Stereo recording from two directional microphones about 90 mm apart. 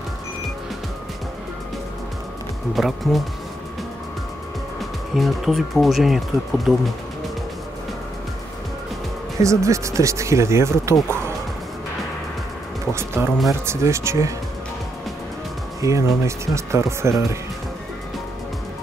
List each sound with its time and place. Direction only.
2.7 s speech: centre (ahead or behind)
5.1 s speech: centre (ahead or behind)
9.4 s speech: 35° right (ahead or behind)
12.9 s speech: 25° right (ahead or behind)
15.8 s speech: 35° right (ahead or behind)